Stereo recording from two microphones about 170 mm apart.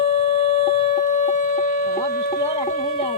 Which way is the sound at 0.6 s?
45° left (ahead or behind).